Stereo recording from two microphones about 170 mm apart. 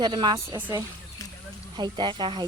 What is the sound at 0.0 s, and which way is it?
Speech, 25° right (ahead or behind).